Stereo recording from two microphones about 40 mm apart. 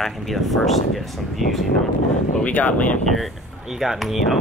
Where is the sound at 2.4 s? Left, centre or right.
Left.